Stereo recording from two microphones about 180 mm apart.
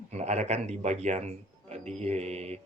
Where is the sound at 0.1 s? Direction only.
40° right (ahead or behind).